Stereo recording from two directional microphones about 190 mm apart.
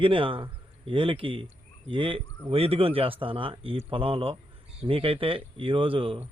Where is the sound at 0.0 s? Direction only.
25° right (ahead or behind).